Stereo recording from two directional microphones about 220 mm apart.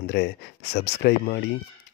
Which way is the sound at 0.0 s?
50° left (ahead or behind).